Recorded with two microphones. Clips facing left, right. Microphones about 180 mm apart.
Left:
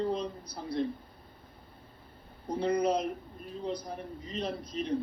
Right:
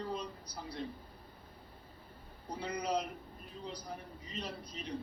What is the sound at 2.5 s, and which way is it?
Speech, 55° left (ahead or behind).